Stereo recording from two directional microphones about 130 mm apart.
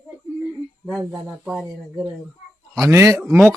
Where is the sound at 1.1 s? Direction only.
5° right (ahead or behind).